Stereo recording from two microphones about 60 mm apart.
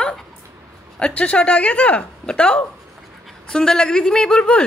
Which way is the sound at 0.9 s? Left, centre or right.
Centre.